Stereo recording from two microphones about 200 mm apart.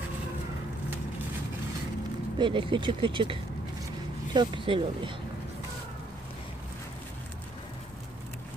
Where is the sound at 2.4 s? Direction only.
25° right (ahead or behind).